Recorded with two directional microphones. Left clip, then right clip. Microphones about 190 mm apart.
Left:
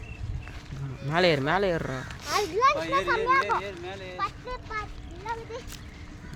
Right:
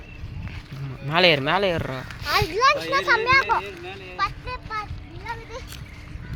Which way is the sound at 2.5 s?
35° right (ahead or behind).